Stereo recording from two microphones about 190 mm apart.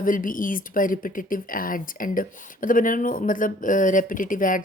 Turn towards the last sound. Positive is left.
turn(degrees=45)  # may be behind; listen again after turning